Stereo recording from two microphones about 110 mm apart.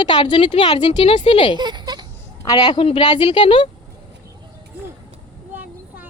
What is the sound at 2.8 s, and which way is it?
Speech, 60° left (ahead or behind).